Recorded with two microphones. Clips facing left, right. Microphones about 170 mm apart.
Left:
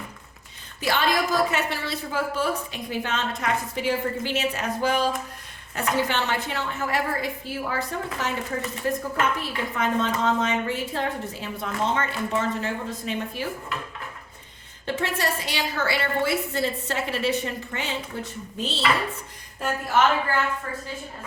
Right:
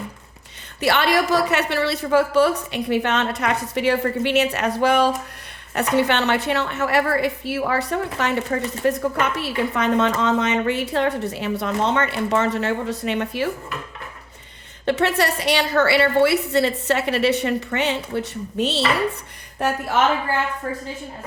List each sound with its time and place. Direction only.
0.8 s a woman's voice: 70° right (ahead or behind)
14.8 s a woman's voice: 70° right (ahead or behind)